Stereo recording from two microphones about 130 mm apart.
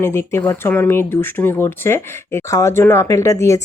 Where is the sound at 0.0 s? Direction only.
20° left (ahead or behind).